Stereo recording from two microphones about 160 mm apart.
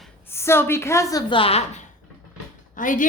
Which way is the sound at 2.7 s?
55° left (ahead or behind).